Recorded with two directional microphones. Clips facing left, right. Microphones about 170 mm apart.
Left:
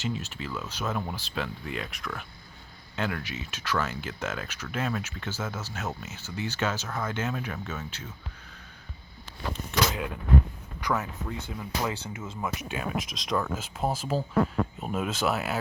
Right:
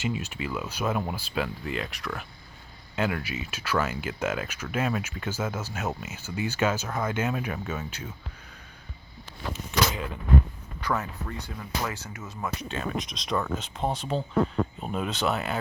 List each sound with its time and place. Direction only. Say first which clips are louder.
0.0 s speech: right 2 dB; 10° right (ahead or behind)
1.6 s speech: right 3 dB; centre (ahead or behind)
9.5 s speech: right 1 dB; centre (ahead or behind)
11.3 s speech: left 1 dB; 20° left (ahead or behind)
12.4 s speech: right 1 dB; 10° left (ahead or behind)